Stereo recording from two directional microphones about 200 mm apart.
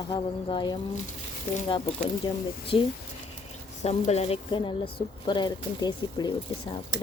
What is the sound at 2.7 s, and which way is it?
Speech, 30° left (ahead or behind).